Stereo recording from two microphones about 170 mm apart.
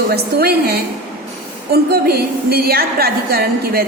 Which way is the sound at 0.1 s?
70° right (ahead or behind).